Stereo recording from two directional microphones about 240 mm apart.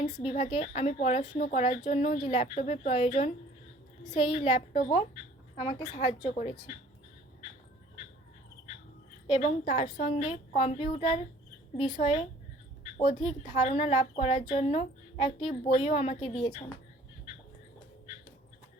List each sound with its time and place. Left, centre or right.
0.0 s a woman's voice: left
9.2 s a woman's voice: left